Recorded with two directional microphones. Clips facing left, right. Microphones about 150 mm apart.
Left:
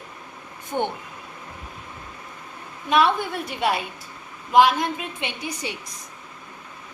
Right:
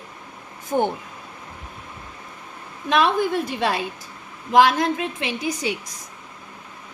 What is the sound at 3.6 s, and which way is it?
A woman's voice, 90° right.